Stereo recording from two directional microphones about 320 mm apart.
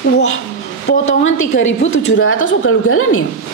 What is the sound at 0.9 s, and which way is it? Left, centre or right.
Speech, left.